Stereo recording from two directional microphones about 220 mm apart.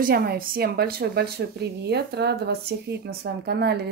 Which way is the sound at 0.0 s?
40° right (ahead or behind).